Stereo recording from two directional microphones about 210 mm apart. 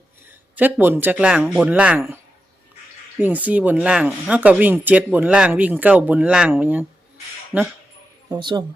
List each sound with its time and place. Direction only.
0.5 s speech: 10° right (ahead or behind)
3.2 s speech: 10° right (ahead or behind)
8.3 s speech: 20° right (ahead or behind)